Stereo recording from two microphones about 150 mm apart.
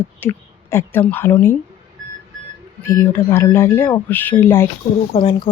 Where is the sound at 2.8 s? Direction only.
15° left (ahead or behind).